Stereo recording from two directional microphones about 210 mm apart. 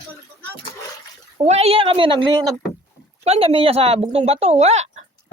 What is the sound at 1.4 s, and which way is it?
Speech, 30° right (ahead or behind).